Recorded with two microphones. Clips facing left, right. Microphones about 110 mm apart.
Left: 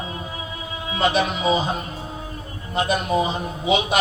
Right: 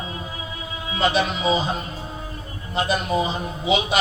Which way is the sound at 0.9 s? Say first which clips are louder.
Left 1 dB; 55° left (ahead or behind).